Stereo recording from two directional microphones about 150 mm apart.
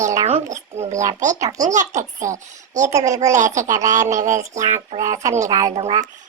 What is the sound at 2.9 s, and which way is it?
Speech, 20° right (ahead or behind).